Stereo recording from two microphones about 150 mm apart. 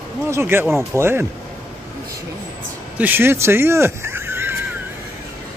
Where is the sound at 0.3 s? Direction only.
15° right (ahead or behind).